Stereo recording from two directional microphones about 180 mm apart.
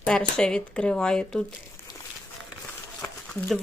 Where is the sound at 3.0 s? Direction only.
5° left (ahead or behind).